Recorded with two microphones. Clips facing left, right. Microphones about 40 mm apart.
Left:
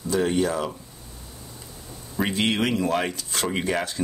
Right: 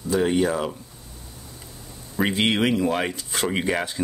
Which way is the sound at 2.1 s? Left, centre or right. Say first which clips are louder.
Right 2 dB; centre.